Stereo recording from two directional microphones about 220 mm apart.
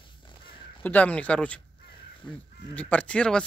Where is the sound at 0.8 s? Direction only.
5° left (ahead or behind).